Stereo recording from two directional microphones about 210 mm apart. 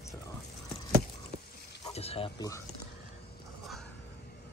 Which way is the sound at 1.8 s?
30° left (ahead or behind).